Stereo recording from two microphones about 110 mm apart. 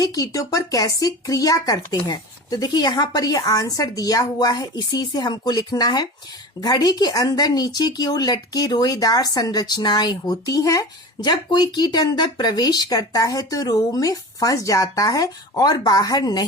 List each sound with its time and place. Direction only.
0.0 s speech: 30° left (ahead or behind)